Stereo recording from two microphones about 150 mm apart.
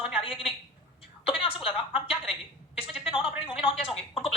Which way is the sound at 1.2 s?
35° left (ahead or behind).